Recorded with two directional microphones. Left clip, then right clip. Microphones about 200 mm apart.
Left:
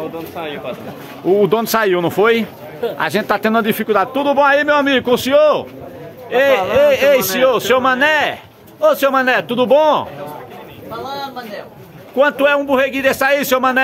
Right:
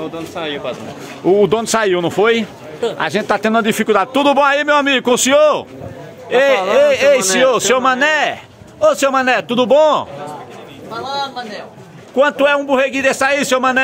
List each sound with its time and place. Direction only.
0.4 s speech: 55° right (ahead or behind)
1.2 s a man's voice: 15° right (ahead or behind)
6.3 s speech: 20° right (ahead or behind)
12.2 s speech: 10° right (ahead or behind)